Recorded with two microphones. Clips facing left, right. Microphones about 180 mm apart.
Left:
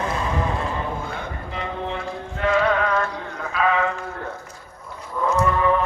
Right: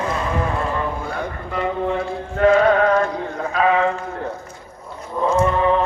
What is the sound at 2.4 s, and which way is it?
Music, 45° right (ahead or behind).